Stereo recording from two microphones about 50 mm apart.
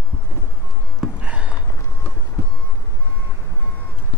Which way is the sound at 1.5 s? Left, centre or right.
Left.